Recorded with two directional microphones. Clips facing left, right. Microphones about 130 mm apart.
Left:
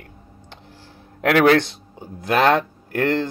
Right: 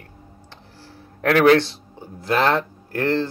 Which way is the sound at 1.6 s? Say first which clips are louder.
Left 1 dB; 20° left (ahead or behind).